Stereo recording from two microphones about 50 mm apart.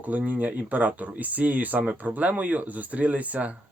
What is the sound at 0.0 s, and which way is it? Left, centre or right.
Speech, right.